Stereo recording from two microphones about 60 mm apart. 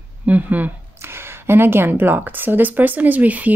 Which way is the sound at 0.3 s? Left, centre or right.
Right.